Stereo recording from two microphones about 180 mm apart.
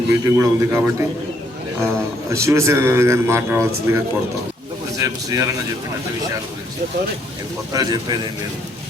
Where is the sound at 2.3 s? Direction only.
15° right (ahead or behind).